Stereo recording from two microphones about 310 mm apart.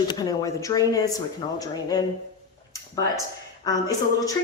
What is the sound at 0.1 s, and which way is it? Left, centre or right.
Speech, centre.